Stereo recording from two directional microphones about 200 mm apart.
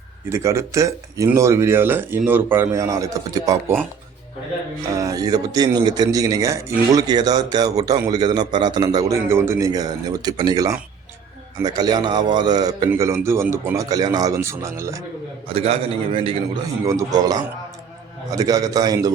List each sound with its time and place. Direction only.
0.3 s speech: 15° right (ahead or behind)
4.9 s a man's voice: 20° right (ahead or behind)
15.4 s a man's voice: 30° right (ahead or behind)
16.8 s a man's voice: 15° right (ahead or behind)